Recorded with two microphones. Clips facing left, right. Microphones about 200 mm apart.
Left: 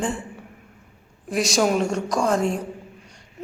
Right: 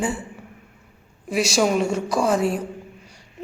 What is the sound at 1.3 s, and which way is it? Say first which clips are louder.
A woman's voice: right 1 dB; centre (ahead or behind).